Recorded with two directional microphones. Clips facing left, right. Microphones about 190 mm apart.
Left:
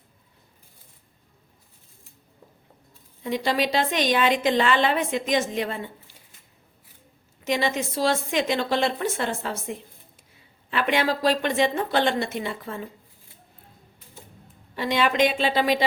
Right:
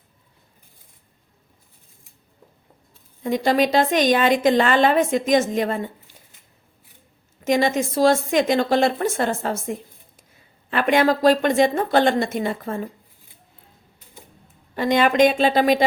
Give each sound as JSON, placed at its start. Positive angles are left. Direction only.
{"t": 3.2, "sound": "a woman's voice", "side_deg": -45}
{"t": 7.4, "sound": "a woman's voice", "side_deg": -45}
{"t": 14.8, "sound": "a woman's voice", "side_deg": -45}